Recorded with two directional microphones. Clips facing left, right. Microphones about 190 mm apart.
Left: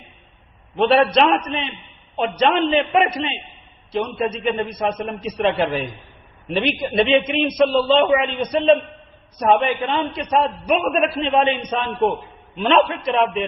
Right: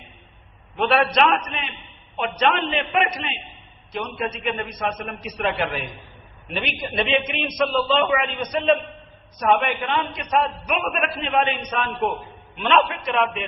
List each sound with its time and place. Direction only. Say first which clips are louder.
0.8 s a man's voice: left 4 dB; 30° left (ahead or behind)